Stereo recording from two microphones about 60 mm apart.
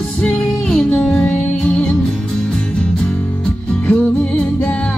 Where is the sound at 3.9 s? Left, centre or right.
Left.